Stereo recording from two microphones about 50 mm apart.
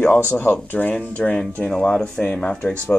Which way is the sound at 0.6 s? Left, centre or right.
Left.